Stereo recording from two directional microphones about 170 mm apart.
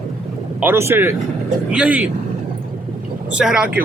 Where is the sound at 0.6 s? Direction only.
15° right (ahead or behind).